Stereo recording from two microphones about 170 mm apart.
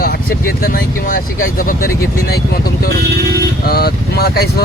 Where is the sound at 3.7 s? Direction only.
65° left (ahead or behind).